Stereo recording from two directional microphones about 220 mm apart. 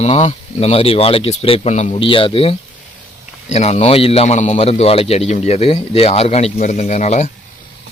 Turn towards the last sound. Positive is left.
turn(degrees=30)  # may be behind; listen again after turning